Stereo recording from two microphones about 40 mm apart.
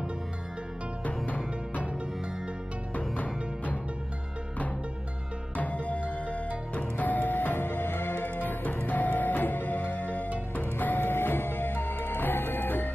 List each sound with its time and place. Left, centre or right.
1.0 s music: left
2.9 s music: left
5.6 s music: left
8.7 s music: left